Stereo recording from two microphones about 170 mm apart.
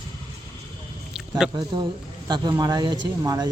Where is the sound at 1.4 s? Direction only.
5° right (ahead or behind).